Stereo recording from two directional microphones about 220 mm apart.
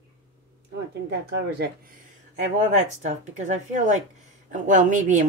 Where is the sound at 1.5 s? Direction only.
45° right (ahead or behind).